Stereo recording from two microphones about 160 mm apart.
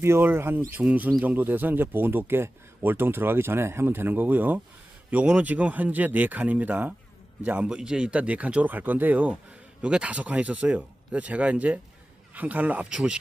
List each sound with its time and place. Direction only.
0.0 s speech: 15° right (ahead or behind)